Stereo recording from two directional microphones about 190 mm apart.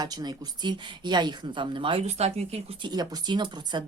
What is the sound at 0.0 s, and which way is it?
Speech, 20° right (ahead or behind).